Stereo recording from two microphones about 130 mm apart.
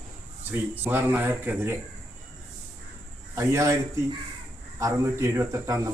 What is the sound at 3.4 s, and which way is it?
Speech, 25° right (ahead or behind).